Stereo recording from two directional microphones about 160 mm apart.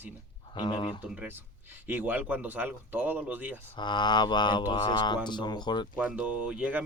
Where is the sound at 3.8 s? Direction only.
30° left (ahead or behind).